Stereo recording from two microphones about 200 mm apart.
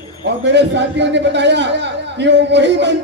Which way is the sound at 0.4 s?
60° right (ahead or behind).